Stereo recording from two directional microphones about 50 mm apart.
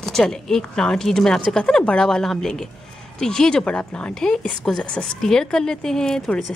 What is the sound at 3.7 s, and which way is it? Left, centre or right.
Speech, left.